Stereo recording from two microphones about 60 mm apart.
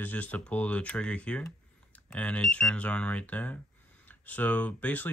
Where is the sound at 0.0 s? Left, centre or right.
Left.